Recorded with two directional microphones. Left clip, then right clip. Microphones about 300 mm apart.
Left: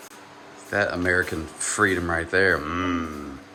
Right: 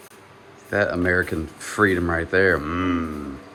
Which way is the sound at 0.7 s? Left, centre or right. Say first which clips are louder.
Right 2 dB; centre.